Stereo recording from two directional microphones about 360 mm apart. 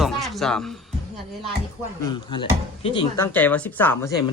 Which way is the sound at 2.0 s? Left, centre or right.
Centre.